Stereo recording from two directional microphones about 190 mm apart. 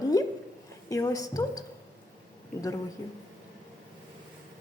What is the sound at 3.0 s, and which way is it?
Speech, 15° left (ahead or behind).